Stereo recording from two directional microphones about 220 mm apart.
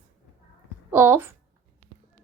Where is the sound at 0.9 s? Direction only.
10° right (ahead or behind).